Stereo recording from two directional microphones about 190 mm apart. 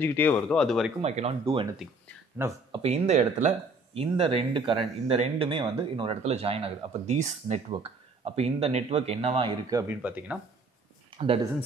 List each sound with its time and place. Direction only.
0.0 s speech: 10° left (ahead or behind)
1.0 s speech: 35° right (ahead or behind)
2.4 s speech: 10° right (ahead or behind)
2.8 s speech: 35° right (ahead or behind); by 10.4 s 5° right (ahead or behind)